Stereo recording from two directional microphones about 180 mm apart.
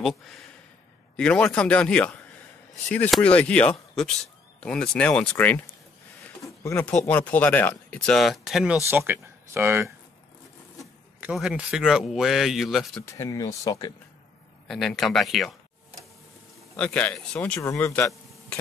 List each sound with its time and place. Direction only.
0.0 s speech: centre (ahead or behind)
6.2 s a sound: 15° left (ahead or behind)
7.1 s speech: 10° left (ahead or behind); by 9.9 s 15° right (ahead or behind)
10.8 s speech: 5° right (ahead or behind)
13.0 s speech: 15° left (ahead or behind)
14.7 s speech: centre (ahead or behind)
16.7 s speech: 5° left (ahead or behind)